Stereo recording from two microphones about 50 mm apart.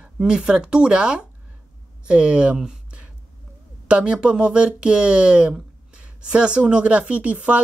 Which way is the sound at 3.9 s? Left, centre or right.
Centre.